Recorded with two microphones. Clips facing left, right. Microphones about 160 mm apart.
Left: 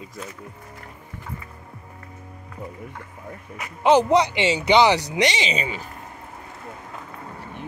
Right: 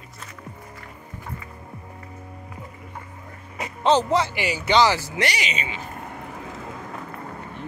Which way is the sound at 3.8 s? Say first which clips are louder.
Left 3 dB; 15° left (ahead or behind).